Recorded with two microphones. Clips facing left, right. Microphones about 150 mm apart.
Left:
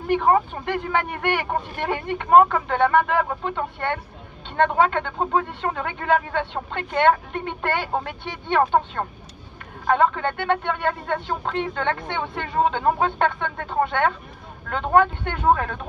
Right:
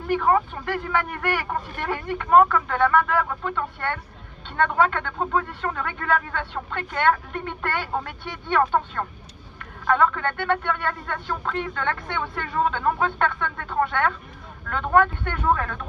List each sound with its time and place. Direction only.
0.1 s speech: 25° left (ahead or behind)